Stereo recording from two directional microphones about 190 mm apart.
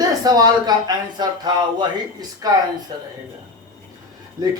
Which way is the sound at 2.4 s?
20° right (ahead or behind).